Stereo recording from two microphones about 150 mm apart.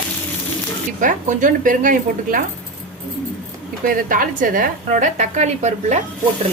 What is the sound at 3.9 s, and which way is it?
A woman's voice, 65° right (ahead or behind).